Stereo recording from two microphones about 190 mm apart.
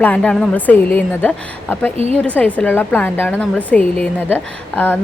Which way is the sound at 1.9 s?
35° right (ahead or behind).